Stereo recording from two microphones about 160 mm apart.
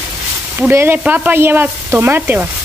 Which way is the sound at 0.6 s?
15° right (ahead or behind).